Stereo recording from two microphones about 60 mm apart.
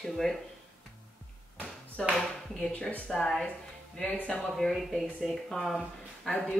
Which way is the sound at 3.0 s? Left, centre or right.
Centre.